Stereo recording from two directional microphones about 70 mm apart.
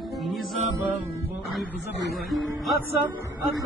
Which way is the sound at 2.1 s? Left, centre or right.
Centre.